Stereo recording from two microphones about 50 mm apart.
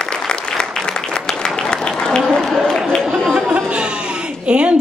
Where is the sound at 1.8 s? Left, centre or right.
Centre.